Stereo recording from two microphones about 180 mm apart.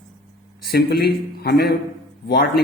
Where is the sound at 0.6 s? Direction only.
60° left (ahead or behind).